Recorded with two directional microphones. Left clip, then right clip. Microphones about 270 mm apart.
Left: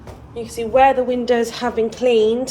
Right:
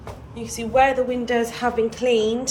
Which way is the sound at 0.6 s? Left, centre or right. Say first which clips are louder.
Left 4 dB; centre.